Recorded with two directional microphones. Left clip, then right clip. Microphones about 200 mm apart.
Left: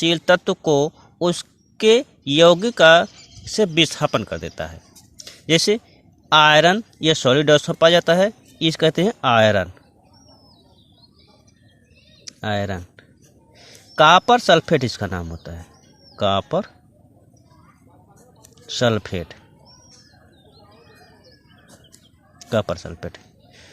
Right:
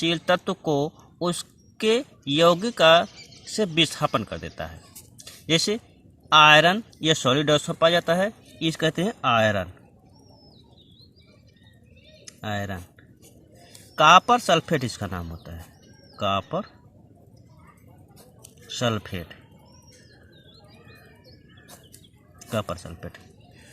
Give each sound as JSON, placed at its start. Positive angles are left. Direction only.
{"t": 0.0, "sound": "speech", "side_deg": 25}
{"t": 5.2, "sound": "a sound", "side_deg": 25}
{"t": 6.2, "sound": "speech", "side_deg": 30}
{"t": 12.4, "sound": "speech", "side_deg": 35}
{"t": 18.8, "sound": "speech", "side_deg": 30}
{"t": 22.4, "sound": "speech", "side_deg": 30}